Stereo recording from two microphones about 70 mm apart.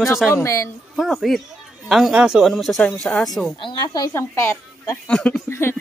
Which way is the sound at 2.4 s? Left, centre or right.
Centre.